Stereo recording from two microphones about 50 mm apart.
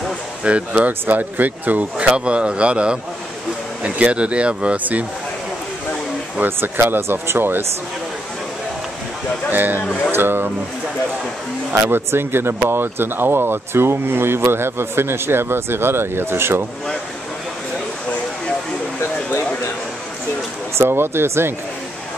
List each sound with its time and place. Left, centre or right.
0.4 s speech: right
6.4 s speech: right
9.5 s speech: right
11.7 s speech: right
20.7 s speech: right